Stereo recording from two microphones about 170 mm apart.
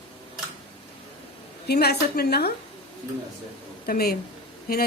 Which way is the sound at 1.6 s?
70° left (ahead or behind).